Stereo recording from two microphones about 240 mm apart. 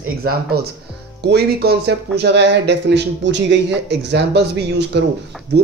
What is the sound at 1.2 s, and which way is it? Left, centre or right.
Speech, right.